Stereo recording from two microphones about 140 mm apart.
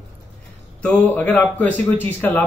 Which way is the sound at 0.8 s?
10° left (ahead or behind).